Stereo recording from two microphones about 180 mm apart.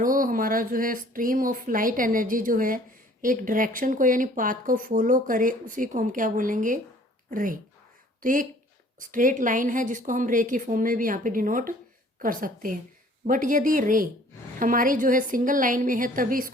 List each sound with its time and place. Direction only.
0.0 s a woman's voice: 50° right (ahead or behind)